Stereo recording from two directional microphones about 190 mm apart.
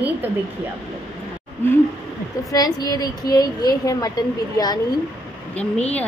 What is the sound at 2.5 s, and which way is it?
A woman's voice, 20° left (ahead or behind).